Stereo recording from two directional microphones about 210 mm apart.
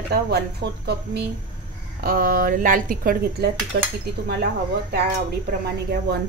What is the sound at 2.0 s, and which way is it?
A woman's voice, 45° right (ahead or behind).